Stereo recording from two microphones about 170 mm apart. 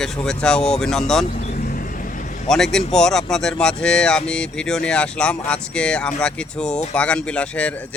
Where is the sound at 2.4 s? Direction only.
Centre (ahead or behind).